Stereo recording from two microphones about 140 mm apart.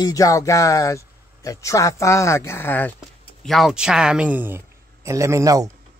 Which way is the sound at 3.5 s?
Centre (ahead or behind).